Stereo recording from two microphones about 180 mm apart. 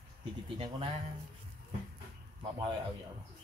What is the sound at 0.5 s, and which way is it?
Speech, 30° right (ahead or behind).